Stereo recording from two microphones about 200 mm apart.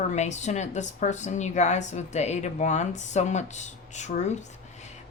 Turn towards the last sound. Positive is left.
turn(degrees=35)  # may be behind; listen again after turning